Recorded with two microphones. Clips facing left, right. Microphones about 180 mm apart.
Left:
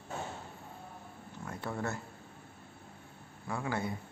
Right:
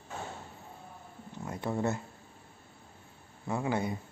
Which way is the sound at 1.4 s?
20° right (ahead or behind).